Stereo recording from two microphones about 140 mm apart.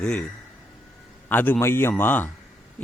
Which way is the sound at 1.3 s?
15° left (ahead or behind).